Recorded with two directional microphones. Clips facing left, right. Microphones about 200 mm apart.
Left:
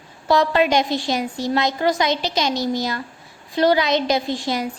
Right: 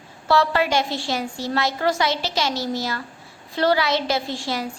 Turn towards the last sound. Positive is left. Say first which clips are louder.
# left 4 dB
turn(degrees=20)  # may be behind; listen again after turning